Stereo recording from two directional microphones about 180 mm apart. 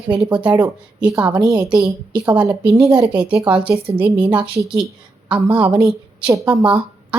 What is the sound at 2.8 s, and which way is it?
Speech, 20° right (ahead or behind).